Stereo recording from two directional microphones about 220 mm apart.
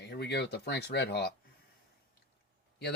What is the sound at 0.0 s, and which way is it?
Speech, 50° left (ahead or behind).